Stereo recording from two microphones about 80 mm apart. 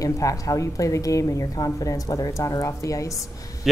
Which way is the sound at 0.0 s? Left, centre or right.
Left.